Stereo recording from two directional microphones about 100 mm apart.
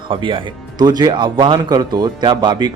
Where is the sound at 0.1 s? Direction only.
60° right (ahead or behind).